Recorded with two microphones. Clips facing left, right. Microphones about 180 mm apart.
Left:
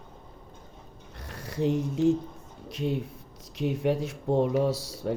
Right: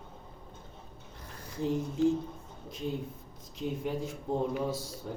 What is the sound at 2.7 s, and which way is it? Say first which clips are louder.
Speech: left 6 dB; 75° left (ahead or behind).